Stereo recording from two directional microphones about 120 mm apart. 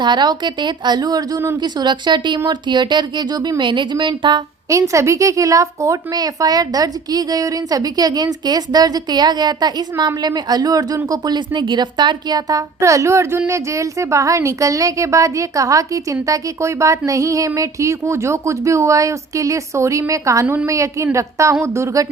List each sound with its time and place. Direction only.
0.0 s a woman's voice: 40° right (ahead or behind)
4.7 s a woman's voice: 25° right (ahead or behind)